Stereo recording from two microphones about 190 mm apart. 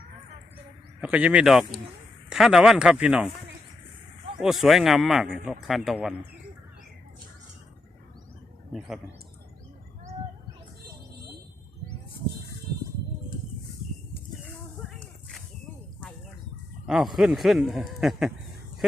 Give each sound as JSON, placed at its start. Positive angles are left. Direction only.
{"t": 1.0, "sound": "a man's voice", "side_deg": -5}
{"t": 4.4, "sound": "a man's voice", "side_deg": 0}
{"t": 16.8, "sound": "a man's voice", "side_deg": 0}